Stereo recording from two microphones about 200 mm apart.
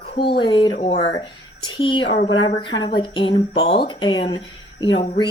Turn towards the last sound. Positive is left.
turn(degrees=25)  # may be behind; listen again after turning